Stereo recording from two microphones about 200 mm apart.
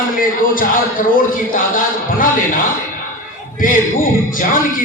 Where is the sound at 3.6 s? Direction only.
45° left (ahead or behind).